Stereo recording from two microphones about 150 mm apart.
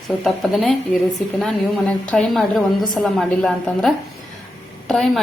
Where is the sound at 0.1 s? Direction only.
Centre (ahead or behind).